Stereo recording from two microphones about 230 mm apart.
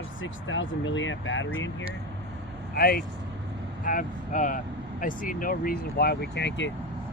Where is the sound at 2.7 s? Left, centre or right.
Left.